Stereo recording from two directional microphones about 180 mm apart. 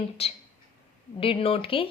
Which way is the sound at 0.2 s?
35° left (ahead or behind).